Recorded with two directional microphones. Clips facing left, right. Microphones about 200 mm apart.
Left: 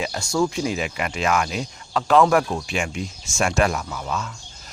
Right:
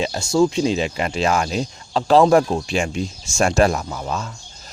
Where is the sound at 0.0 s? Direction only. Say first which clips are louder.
Right 5 dB; 25° right (ahead or behind).